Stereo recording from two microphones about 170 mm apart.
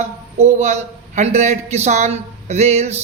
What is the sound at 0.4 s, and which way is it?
A man's voice, 45° right (ahead or behind).